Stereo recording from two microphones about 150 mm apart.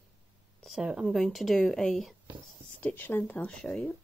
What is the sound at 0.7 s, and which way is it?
Speech, 5° right (ahead or behind).